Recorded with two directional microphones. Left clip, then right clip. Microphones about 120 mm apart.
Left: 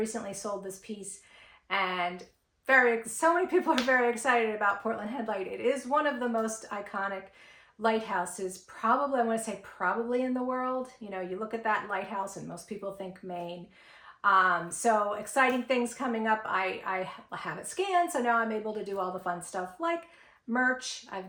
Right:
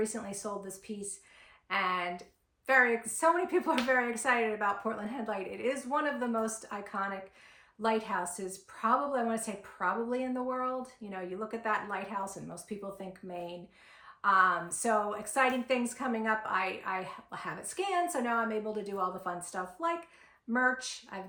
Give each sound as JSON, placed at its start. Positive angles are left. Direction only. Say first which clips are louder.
{"t": 0.1, "sound": "speech", "louder": "left 3 dB", "side_deg": 25}
{"t": 21.1, "sound": "speech", "louder": "left 5 dB", "side_deg": 25}